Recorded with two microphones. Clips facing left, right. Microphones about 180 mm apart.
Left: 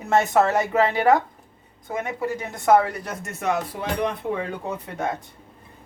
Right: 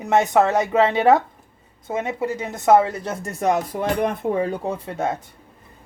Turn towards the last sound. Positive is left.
turn(degrees=-30)  # may be behind; listen again after turning